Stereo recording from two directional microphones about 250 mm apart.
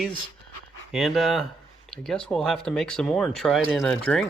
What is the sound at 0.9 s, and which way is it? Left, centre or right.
Speech, centre.